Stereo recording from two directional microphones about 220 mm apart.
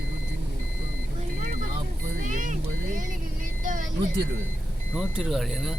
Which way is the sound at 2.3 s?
35° right (ahead or behind).